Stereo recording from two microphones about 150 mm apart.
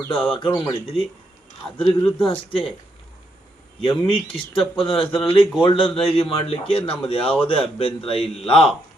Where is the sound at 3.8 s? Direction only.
35° left (ahead or behind).